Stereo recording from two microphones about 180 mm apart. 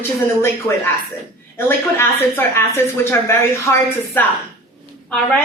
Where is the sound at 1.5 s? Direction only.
10° left (ahead or behind).